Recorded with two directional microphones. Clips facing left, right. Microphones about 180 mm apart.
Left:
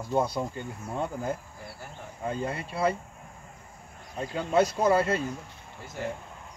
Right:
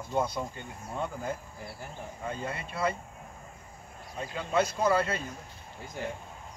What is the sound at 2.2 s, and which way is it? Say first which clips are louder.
Speech: left 5 dB; 35° left (ahead or behind).